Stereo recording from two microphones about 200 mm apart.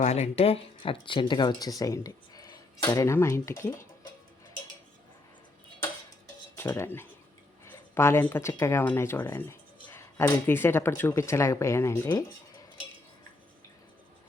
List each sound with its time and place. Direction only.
0.0 s speech: 35° left (ahead or behind)
1.8 s a sound: 20° left (ahead or behind)
2.8 s speech: 15° left (ahead or behind)
6.6 s cutlery: 10° left (ahead or behind)
7.6 s speech: 15° left (ahead or behind)